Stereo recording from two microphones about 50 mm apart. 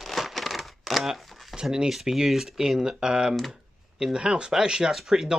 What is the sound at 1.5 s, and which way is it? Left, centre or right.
Speech, centre.